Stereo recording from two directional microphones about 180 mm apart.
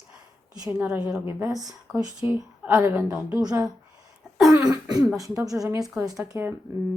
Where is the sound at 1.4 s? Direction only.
20° right (ahead or behind).